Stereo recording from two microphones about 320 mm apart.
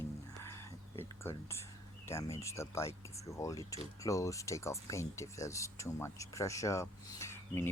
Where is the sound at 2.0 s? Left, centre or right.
Centre.